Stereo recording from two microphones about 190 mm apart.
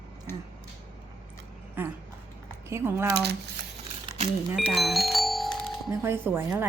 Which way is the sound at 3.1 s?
60° right (ahead or behind).